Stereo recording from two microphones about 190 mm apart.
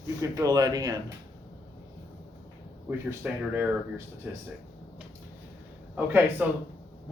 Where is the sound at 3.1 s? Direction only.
10° right (ahead or behind).